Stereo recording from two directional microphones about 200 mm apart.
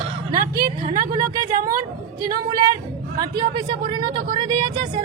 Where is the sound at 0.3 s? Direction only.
20° right (ahead or behind).